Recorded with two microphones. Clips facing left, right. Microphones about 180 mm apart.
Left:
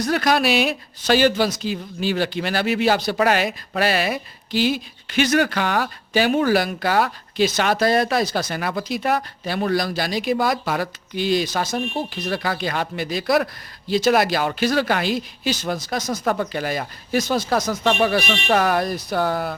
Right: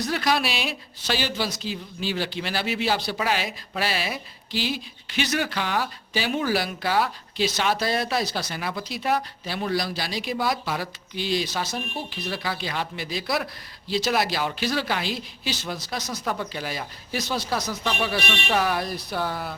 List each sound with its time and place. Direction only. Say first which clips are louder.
0.0 s speech: left 5 dB; 50° left (ahead or behind)